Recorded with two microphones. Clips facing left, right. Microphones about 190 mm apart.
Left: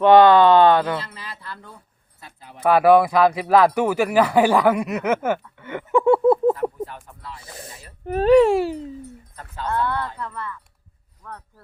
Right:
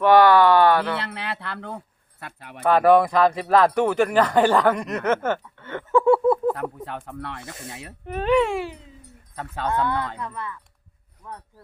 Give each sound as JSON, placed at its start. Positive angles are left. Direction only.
{"t": 0.0, "sound": "speech", "side_deg": 20}
{"t": 0.9, "sound": "speech", "side_deg": -65}
{"t": 2.6, "sound": "speech", "side_deg": 10}
{"t": 6.6, "sound": "speech", "side_deg": -65}
{"t": 8.0, "sound": "speech", "side_deg": 40}
{"t": 9.3, "sound": "speech", "side_deg": -65}
{"t": 9.6, "sound": "speech", "side_deg": -15}